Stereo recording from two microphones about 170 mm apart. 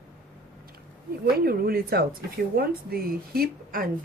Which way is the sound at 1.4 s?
60° right (ahead or behind).